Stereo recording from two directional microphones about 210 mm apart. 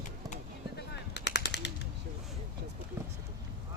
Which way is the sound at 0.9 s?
55° left (ahead or behind).